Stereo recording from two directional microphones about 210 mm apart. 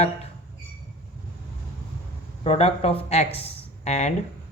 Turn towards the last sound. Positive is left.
turn(degrees=30)  # may be behind; listen again after turning